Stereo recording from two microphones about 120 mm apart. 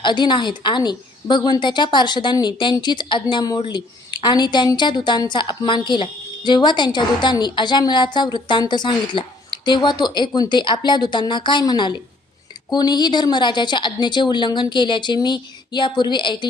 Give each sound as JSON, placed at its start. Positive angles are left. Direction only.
{"t": 0.0, "sound": "a woman's voice", "side_deg": 40}